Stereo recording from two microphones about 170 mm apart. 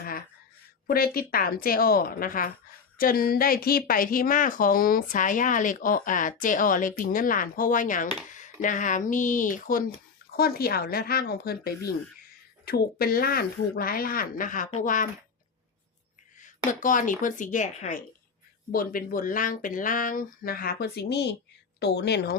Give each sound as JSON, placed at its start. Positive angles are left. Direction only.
{"t": 0.9, "sound": "speech", "side_deg": 60}
{"t": 10.3, "sound": "speech", "side_deg": 65}
{"t": 16.4, "sound": "speech", "side_deg": 50}